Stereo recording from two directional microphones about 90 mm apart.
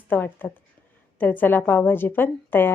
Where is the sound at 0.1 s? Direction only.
20° left (ahead or behind).